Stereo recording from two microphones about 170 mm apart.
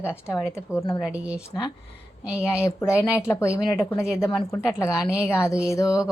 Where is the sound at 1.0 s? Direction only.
5° right (ahead or behind).